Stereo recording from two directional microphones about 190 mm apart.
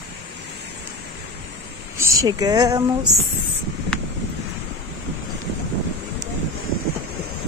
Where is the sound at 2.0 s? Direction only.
20° right (ahead or behind).